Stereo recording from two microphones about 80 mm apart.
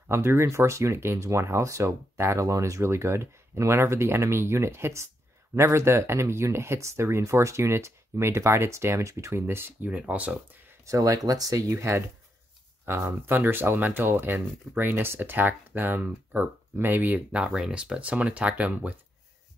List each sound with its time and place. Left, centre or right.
0.1 s speech: right
10.9 s speech: right; by 18.9 s centre